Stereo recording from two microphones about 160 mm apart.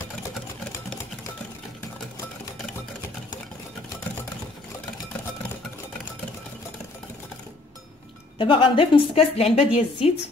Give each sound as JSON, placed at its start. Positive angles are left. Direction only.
{"t": 8.4, "sound": "a woman's voice", "side_deg": 35}